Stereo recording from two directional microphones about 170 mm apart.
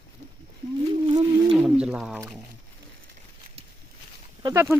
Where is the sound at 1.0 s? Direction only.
30° right (ahead or behind).